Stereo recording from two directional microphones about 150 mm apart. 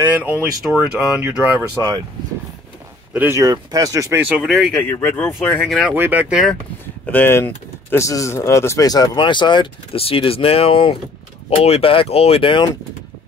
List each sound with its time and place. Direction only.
0.1 s speech: 10° right (ahead or behind)
1.6 s speech: 25° right (ahead or behind)
3.1 s speech: 10° right (ahead or behind)
3.3 s speech: 25° right (ahead or behind)
4.3 s speech: 5° right (ahead or behind)
4.7 s speech: 10° left (ahead or behind)
5.7 s speech: centre (ahead or behind)
5.9 s speech: 10° right (ahead or behind)
7.1 s speech: 15° left (ahead or behind); by 12.6 s 35° left (ahead or behind)